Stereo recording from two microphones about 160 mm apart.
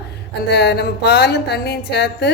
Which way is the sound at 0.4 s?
90° left.